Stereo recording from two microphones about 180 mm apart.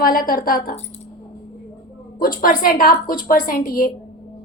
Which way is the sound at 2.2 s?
50° left (ahead or behind).